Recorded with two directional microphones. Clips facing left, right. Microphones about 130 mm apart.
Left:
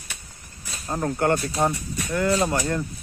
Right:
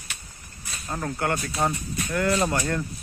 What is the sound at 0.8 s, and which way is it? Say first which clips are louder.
Speech: left 5 dB; 25° left (ahead or behind).